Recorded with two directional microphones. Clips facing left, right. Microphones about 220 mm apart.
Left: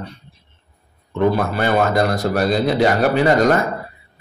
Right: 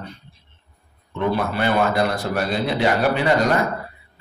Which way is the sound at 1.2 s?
45° left (ahead or behind).